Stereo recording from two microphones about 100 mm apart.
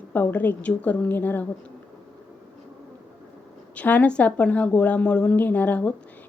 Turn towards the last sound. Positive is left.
turn(degrees=15)  # may be behind; listen again after turning